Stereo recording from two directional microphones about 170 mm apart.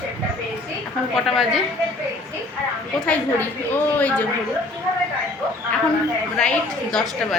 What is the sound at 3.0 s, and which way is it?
A woman's voice, 10° left (ahead or behind).